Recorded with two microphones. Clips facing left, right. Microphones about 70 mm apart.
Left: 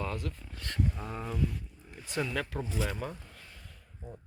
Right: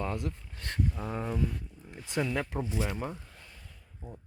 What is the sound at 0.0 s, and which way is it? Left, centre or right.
Speech, right.